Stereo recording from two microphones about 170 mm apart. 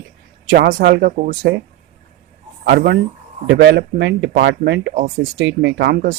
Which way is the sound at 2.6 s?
80° right.